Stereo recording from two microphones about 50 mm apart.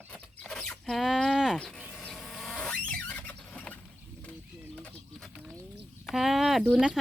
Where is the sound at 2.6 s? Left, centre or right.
Centre.